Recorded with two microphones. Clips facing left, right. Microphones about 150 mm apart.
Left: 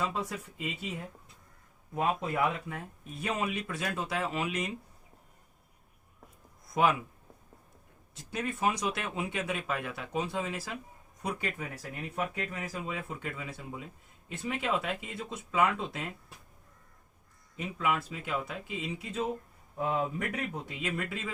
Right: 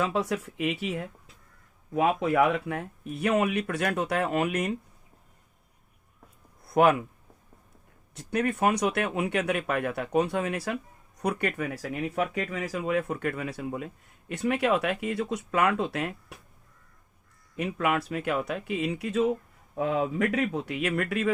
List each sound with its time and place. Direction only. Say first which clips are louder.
0.0 s speech: right 7 dB; 75° right (ahead or behind); by 4.8 s 60° right (ahead or behind)
6.7 s speech: right 6 dB; 60° right (ahead or behind)
8.1 s speech: right 8 dB; 60° right (ahead or behind)
17.6 s speech: right 5 dB; 70° right (ahead or behind)